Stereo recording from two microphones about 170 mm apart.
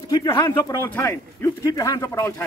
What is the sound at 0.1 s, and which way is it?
Speech, 20° left (ahead or behind).